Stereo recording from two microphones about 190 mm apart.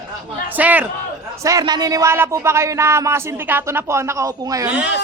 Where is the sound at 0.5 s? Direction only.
10° right (ahead or behind).